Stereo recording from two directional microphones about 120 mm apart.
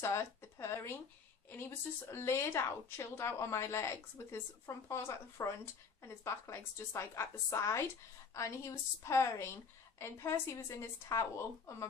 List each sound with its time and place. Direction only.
0.0 s a woman's voice: 20° left (ahead or behind)